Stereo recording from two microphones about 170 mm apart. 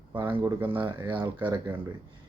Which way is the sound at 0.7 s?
30° right (ahead or behind).